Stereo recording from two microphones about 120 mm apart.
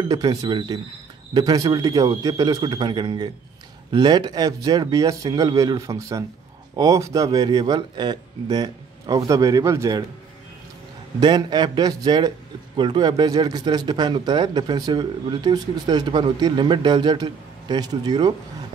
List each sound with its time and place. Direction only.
0.1 s speech: 35° right (ahead or behind)
2.6 s speech: 40° right (ahead or behind); by 10.0 s 25° right (ahead or behind)
11.1 s speech: 35° right (ahead or behind)